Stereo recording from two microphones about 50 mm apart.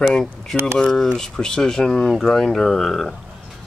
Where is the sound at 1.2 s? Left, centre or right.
Centre.